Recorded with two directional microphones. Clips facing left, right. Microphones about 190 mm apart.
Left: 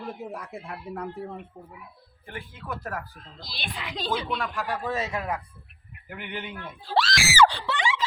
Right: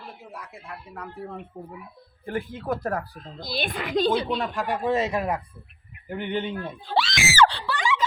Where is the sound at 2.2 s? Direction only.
40° right (ahead or behind).